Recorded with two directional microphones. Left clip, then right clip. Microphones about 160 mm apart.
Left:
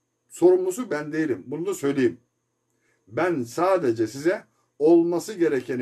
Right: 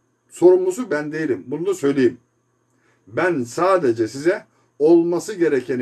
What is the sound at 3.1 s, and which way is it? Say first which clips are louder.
A man's voice: right 4 dB; 15° left (ahead or behind).